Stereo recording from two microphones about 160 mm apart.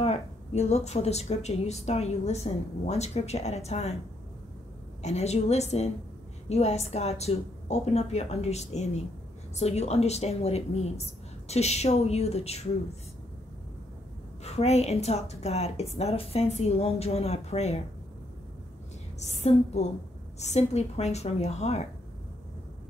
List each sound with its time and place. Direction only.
0.0 s a woman's voice: 40° left (ahead or behind)
5.0 s a woman's voice: 45° left (ahead or behind)
14.4 s a woman's voice: 40° left (ahead or behind)
19.1 s a woman's voice: 45° left (ahead or behind)